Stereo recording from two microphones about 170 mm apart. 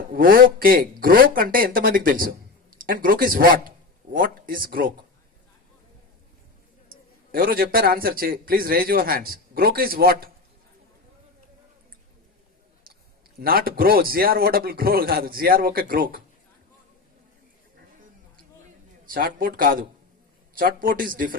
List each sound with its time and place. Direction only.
0.1 s a man's voice: 60° right (ahead or behind)
6.8 s a man's voice: 60° right (ahead or behind)
13.4 s a man's voice: 60° right (ahead or behind)
19.0 s a man's voice: 55° right (ahead or behind)